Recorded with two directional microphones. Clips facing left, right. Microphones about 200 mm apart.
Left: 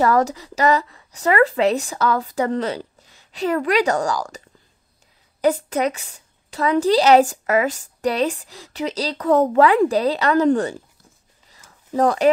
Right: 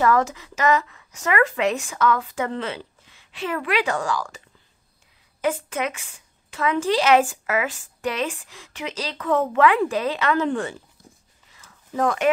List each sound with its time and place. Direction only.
0.0 s a woman's voice: 35° left (ahead or behind)
5.4 s a woman's voice: 35° left (ahead or behind)
11.5 s a sound: 35° left (ahead or behind)